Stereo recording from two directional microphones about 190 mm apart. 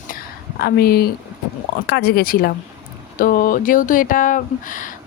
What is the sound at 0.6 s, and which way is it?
Speech, 50° left (ahead or behind).